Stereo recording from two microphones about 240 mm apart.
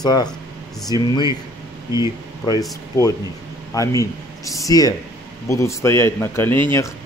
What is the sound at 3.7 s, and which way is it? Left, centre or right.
A man's voice, centre.